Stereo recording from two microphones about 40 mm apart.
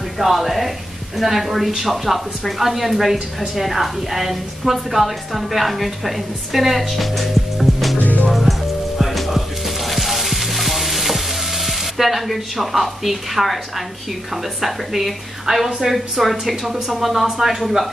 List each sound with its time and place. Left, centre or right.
0.2 s speech: centre
8.0 s music: left
8.3 s music: centre
14.3 s speech: centre